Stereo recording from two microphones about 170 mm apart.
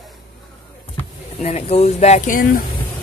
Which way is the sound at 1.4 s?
40° left (ahead or behind).